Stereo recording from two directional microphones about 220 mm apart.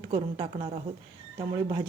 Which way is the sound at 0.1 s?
20° right (ahead or behind).